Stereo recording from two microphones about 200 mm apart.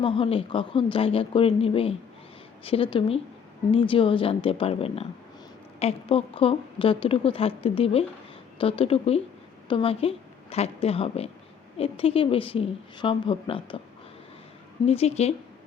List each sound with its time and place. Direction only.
0.0 s a woman's voice: 25° left (ahead or behind)
14.8 s a woman's voice: 30° left (ahead or behind)